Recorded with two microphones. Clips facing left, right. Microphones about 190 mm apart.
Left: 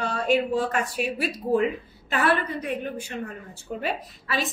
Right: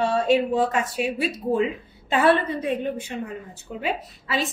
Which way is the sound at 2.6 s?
20° right (ahead or behind).